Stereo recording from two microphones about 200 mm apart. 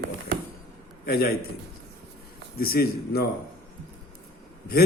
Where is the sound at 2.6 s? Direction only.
50° left (ahead or behind).